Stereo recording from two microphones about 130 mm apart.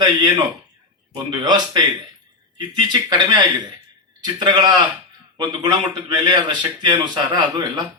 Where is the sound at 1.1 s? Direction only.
35° right (ahead or behind).